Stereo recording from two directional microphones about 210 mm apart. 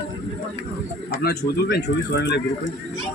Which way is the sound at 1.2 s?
50° left (ahead or behind).